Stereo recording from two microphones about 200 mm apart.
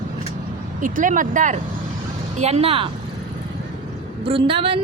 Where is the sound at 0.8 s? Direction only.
40° right (ahead or behind).